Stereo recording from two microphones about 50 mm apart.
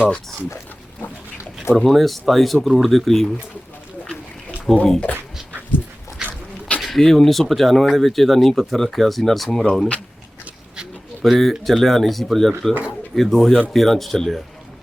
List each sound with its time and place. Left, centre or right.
1.7 s speech: centre
4.7 s speech: centre
6.2 s dog: left
6.8 s speech: centre
11.2 s speech: centre